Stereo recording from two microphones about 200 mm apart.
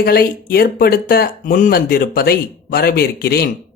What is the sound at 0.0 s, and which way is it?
Speech, 50° left (ahead or behind).